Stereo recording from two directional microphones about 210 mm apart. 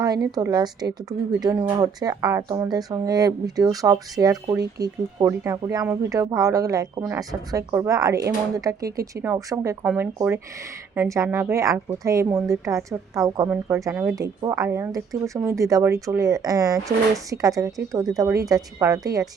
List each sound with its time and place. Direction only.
0.0 s a woman's voice: 20° right (ahead or behind)